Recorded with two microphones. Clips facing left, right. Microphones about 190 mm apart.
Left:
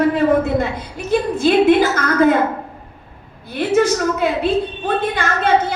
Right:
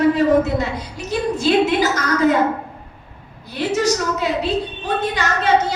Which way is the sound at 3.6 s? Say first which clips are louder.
Left 3 dB; 55° left (ahead or behind).